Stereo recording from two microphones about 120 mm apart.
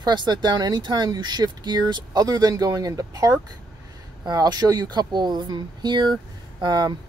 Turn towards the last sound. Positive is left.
turn(degrees=-35)  # may be behind; listen again after turning